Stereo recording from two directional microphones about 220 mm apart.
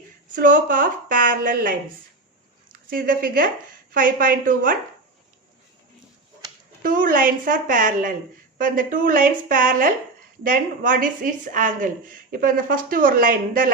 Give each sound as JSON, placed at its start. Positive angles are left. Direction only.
{"t": 0.3, "sound": "speech", "side_deg": -35}
{"t": 2.7, "sound": "speech", "side_deg": -40}
{"t": 6.8, "sound": "speech", "side_deg": -40}